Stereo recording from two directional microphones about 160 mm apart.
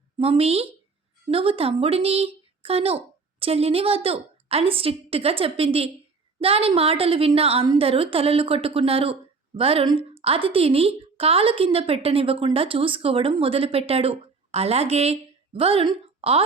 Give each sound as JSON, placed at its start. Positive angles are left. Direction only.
{"t": 0.2, "sound": "a woman's voice", "side_deg": -40}